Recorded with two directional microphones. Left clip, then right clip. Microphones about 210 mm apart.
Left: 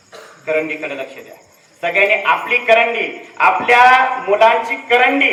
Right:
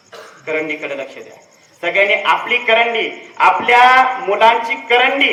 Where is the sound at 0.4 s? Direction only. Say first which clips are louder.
Left 1 dB; 45° right (ahead or behind).